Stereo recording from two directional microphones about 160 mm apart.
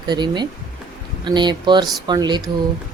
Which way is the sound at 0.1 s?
25° right (ahead or behind).